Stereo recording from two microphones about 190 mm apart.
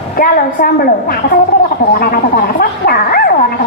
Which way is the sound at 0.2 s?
50° left (ahead or behind).